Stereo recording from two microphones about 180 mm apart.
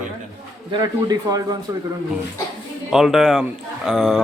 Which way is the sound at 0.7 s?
25° right (ahead or behind).